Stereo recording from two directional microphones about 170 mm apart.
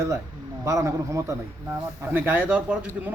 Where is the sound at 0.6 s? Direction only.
15° right (ahead or behind).